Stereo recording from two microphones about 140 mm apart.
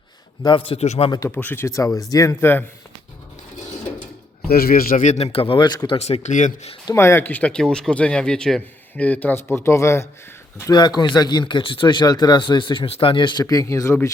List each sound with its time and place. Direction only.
0.4 s speech: 40° left (ahead or behind)
1.3 s speech: 15° left (ahead or behind)
4.4 s a man's voice: 90° left; by 6.0 s 30° left (ahead or behind)
6.0 s a man's voice: 50° left (ahead or behind)
6.9 s speech: 15° left (ahead or behind)
10.7 s speech: 30° left (ahead or behind)
13.4 s speech: 25° left (ahead or behind)